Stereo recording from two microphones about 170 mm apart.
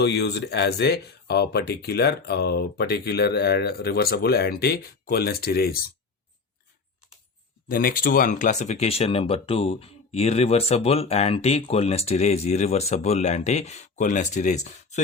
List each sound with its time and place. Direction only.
0.0 s speech: 75° left (ahead or behind)
7.7 s speech: 60° left (ahead or behind)